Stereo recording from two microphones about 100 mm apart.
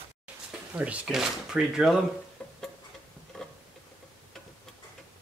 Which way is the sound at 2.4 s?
10° left (ahead or behind).